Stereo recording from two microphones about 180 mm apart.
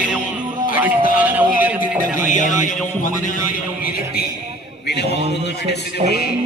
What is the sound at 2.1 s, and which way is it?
Speech, 45° left (ahead or behind).